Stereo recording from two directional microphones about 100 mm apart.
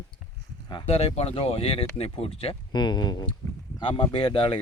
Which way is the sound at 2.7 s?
45° left (ahead or behind).